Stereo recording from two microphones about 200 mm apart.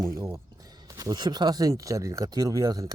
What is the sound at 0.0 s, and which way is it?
Speech, 15° right (ahead or behind).